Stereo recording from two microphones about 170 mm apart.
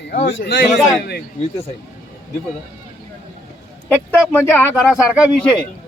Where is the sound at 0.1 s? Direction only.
70° left (ahead or behind).